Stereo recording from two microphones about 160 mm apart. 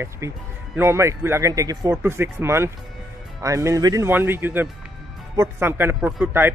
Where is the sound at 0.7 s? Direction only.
15° right (ahead or behind).